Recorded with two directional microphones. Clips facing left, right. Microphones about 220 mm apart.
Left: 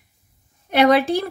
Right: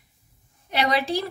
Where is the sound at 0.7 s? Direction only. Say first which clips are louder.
Left 8 dB; 55° left (ahead or behind).